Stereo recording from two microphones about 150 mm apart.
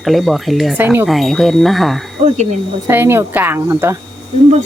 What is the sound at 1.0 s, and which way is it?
Speech, centre (ahead or behind).